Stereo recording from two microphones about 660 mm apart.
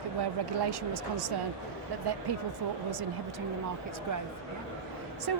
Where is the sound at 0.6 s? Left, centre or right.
Right.